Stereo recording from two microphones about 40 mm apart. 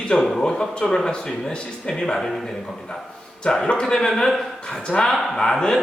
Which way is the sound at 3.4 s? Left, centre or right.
Centre.